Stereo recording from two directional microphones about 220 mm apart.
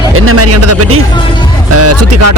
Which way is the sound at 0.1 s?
75° right (ahead or behind).